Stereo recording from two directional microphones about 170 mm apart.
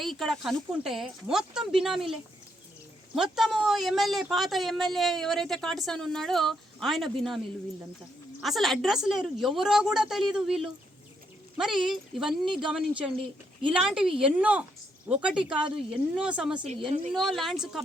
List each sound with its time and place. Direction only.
0.0 s speech: centre (ahead or behind)
3.3 s speech: centre (ahead or behind)
8.4 s speech: centre (ahead or behind)
16.6 s a woman's voice: 40° right (ahead or behind)
17.1 s speech: centre (ahead or behind)